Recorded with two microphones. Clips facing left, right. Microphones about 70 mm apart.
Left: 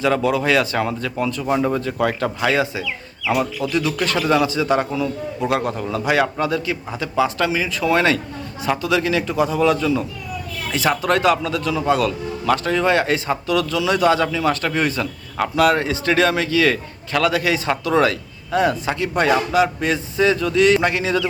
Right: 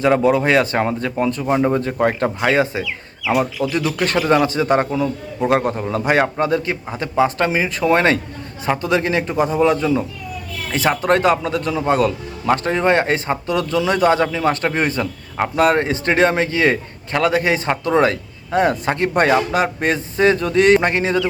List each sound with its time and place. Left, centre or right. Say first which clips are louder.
0.0 s a man's voice: right 3 dB; right
4.3 s a man's voice: right 2 dB; right